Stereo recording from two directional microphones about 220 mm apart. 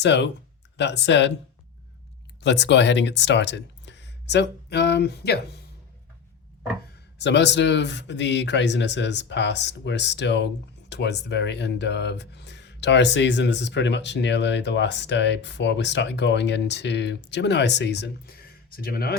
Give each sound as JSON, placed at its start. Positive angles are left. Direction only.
{"t": 0.0, "sound": "speech", "side_deg": 55}
{"t": 2.4, "sound": "speech", "side_deg": 55}
{"t": 7.2, "sound": "speech", "side_deg": 50}